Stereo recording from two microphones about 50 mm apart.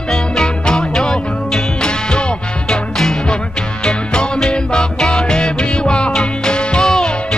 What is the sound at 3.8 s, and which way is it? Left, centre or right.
Music, centre.